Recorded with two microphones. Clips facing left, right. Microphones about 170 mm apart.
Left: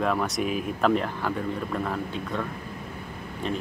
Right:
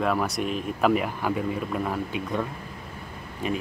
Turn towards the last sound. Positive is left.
turn(degrees=-5)  # may be behind; listen again after turning